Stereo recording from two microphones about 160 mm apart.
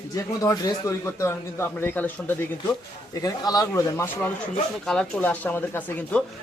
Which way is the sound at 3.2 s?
25° left (ahead or behind).